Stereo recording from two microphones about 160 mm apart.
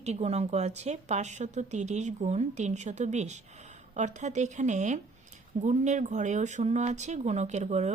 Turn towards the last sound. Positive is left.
turn(degrees=-45)  # may be behind; listen again after turning